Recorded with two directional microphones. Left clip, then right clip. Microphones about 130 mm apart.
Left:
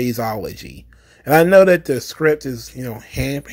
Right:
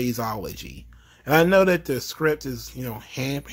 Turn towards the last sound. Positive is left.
turn(degrees=20)  # may be behind; listen again after turning